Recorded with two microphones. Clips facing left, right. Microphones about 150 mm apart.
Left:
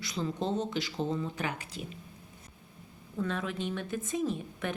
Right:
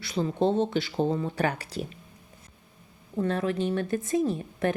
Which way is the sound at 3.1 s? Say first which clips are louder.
Right 7 dB; 40° right (ahead or behind).